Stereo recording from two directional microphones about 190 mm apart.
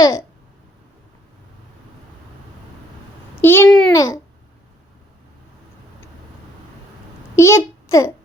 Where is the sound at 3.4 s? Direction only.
10° left (ahead or behind).